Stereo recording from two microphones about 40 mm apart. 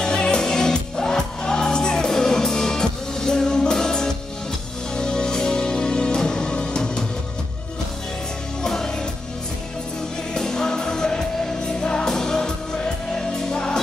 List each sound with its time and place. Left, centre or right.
0.0 s music: left
8.6 s music: centre
10.3 s music: centre